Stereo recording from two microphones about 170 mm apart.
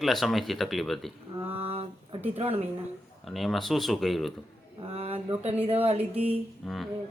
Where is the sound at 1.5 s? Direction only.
35° right (ahead or behind).